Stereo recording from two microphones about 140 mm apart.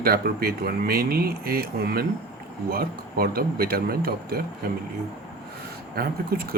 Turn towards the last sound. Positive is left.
turn(degrees=-90)